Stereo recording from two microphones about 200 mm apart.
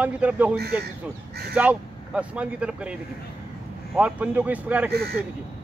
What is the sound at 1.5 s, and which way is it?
Speech, 5° right (ahead or behind).